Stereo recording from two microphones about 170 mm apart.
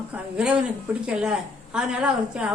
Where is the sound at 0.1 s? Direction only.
5° right (ahead or behind).